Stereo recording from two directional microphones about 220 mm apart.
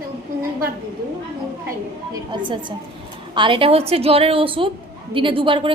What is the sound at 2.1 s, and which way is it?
A woman's voice, 20° right (ahead or behind).